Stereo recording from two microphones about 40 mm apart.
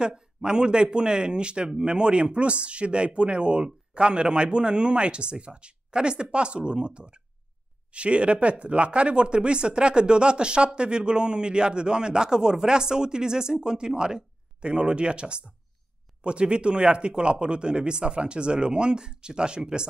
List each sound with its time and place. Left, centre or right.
0.0 s speech: right